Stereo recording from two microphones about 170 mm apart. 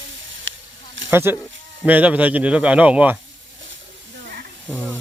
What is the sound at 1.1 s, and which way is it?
Speech, 15° right (ahead or behind).